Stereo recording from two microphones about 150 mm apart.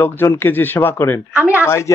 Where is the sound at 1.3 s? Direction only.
10° right (ahead or behind).